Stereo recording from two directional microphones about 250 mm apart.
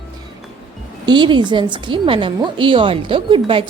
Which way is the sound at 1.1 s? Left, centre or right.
Centre.